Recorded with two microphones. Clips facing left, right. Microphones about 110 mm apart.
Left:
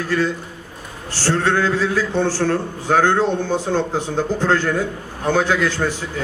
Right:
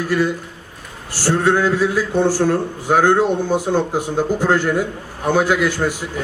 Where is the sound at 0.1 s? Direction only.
10° right (ahead or behind).